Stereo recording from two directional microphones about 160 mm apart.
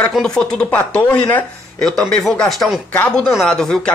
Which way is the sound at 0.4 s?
5° left (ahead or behind).